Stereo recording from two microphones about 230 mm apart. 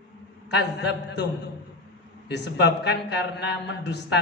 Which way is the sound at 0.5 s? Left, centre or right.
Left.